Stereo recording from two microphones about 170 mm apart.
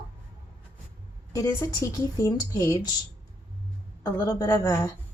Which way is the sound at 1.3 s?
20° left (ahead or behind).